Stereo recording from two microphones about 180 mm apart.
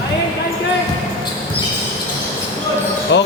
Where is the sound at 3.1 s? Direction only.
75° left (ahead or behind).